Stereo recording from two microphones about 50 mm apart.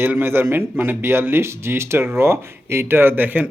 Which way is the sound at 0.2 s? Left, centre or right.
Right.